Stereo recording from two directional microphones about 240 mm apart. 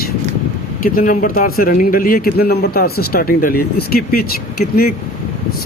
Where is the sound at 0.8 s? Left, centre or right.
Left.